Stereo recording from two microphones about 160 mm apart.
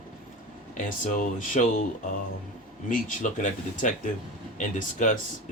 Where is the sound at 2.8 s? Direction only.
55° left (ahead or behind).